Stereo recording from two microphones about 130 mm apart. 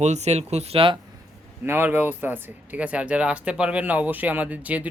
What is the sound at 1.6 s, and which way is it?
Speech, 15° right (ahead or behind).